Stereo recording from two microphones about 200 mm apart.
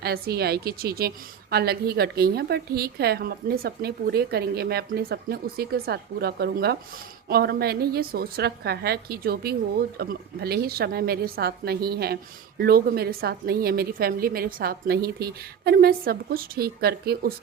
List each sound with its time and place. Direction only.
0.0 s a woman's voice: 50° right (ahead or behind)